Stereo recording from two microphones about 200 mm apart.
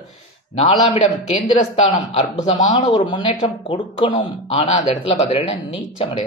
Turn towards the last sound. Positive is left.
turn(degrees=30)  # may be behind; listen again after turning